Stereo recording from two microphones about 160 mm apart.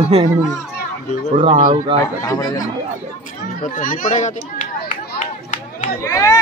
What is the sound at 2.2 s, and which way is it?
Speech, 20° left (ahead or behind).